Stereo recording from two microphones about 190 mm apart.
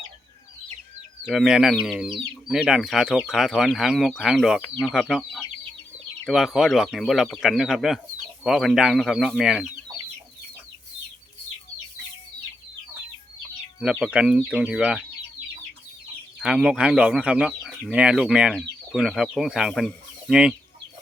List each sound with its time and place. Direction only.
1.3 s speech: centre (ahead or behind)
13.9 s speech: 5° right (ahead or behind)
16.4 s speech: 5° right (ahead or behind)